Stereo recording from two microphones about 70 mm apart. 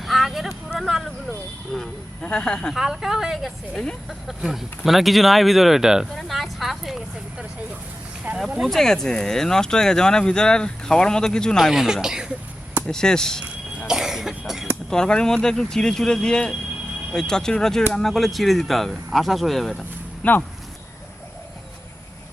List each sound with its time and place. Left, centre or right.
0.0 s vehicle: centre
1.7 s speech: centre
2.7 s speech: centre
6.1 s a sound: centre
8.4 s speech: centre
8.7 s speech: centre
12.9 s speech: centre
13.7 s cough: centre
14.8 s speech: centre
20.2 s speech: centre